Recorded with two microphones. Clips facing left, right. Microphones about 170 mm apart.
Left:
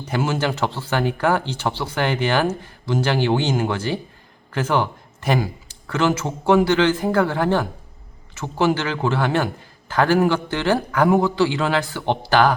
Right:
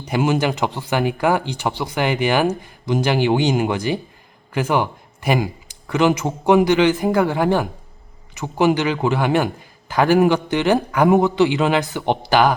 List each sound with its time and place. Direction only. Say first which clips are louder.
0.0 s a man's voice: right 3 dB; 15° right (ahead or behind)